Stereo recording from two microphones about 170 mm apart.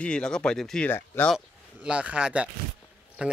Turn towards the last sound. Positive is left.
turn(degrees=-5)  # may be behind; listen again after turning